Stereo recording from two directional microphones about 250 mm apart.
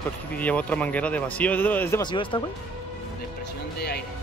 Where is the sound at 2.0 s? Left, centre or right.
Centre.